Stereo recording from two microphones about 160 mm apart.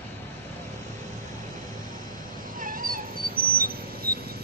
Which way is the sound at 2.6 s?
60° right (ahead or behind).